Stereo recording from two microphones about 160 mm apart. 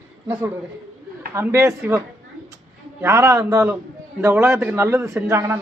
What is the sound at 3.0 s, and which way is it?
A man's voice, 20° right (ahead or behind).